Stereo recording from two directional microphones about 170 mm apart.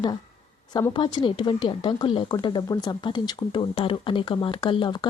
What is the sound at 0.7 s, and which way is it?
A woman's voice, 25° left (ahead or behind).